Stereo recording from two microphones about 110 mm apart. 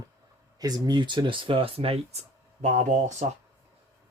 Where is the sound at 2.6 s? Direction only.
90° right.